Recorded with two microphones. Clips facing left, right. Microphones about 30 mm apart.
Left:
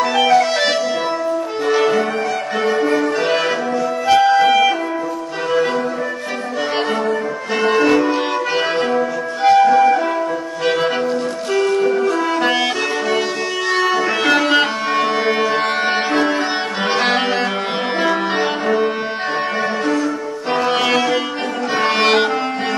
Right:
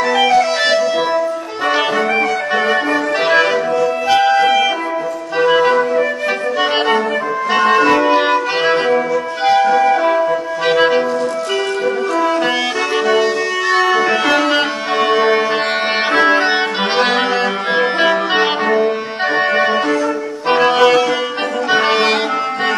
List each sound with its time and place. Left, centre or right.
0.0 s music: centre
1.8 s music: right
3.8 s music: right
4.3 s music: centre
7.8 s music: centre
9.4 s flute: centre
11.5 s organ: centre
11.8 s brass instrument: centre
12.1 s music: centre
16.1 s music: right
17.0 s accordion: centre
20.7 s music: centre